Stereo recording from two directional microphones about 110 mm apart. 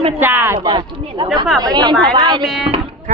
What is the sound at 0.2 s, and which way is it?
Speech, 20° right (ahead or behind).